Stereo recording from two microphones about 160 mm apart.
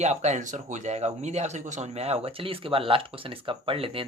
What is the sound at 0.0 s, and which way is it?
Speech, 45° right (ahead or behind).